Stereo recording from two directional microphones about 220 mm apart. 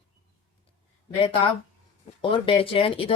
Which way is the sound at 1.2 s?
25° left (ahead or behind).